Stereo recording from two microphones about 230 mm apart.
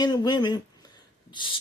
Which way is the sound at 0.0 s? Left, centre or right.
Centre.